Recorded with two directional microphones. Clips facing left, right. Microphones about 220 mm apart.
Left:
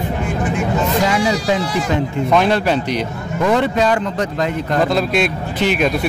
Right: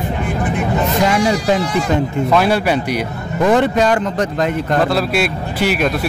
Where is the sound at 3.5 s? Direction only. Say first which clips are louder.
Right 1 dB; 45° right (ahead or behind).